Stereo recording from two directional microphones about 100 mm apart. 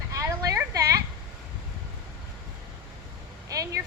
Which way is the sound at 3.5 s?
35° right (ahead or behind).